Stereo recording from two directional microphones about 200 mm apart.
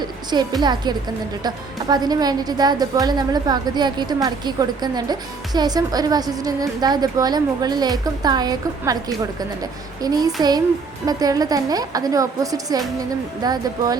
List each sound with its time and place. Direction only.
0.6 s a woman's voice: 20° right (ahead or behind)